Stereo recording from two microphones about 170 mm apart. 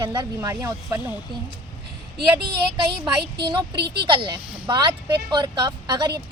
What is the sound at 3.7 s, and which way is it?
Speech, 75° right (ahead or behind).